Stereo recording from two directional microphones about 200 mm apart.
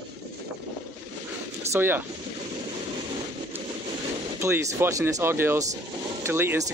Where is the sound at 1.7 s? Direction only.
10° right (ahead or behind).